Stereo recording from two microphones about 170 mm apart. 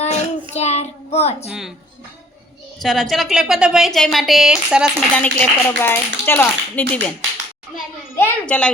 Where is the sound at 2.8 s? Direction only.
Centre (ahead or behind).